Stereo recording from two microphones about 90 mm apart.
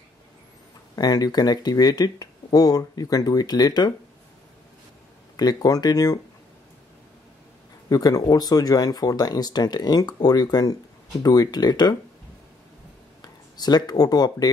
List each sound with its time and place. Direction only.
0.9 s speech: 45° left (ahead or behind)
5.3 s speech: 45° left (ahead or behind)
7.9 s speech: 45° left (ahead or behind)
13.2 s speech: 50° left (ahead or behind)